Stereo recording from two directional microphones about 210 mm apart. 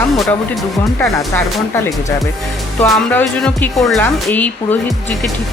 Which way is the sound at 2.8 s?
10° left (ahead or behind).